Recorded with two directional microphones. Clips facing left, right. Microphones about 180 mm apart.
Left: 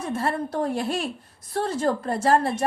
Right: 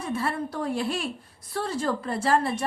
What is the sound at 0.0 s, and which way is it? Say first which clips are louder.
Speech: left 2 dB; 45° left (ahead or behind).